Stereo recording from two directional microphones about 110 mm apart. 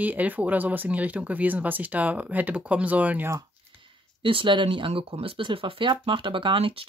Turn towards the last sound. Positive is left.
turn(degrees=-55)  # may be behind; listen again after turning